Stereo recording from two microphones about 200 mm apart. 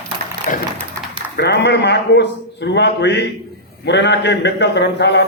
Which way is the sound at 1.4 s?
55° left (ahead or behind).